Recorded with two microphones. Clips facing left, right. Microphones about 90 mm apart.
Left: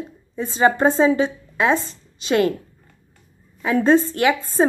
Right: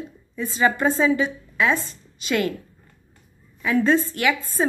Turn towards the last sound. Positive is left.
turn(degrees=30)  # may be behind; listen again after turning